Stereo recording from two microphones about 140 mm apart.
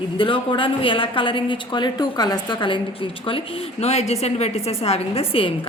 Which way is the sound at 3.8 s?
50° left (ahead or behind).